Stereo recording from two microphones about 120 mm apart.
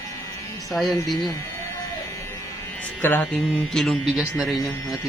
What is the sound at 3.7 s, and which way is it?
Speech, 5° left (ahead or behind).